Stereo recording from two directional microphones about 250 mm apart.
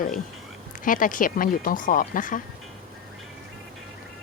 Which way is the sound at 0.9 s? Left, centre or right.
Left.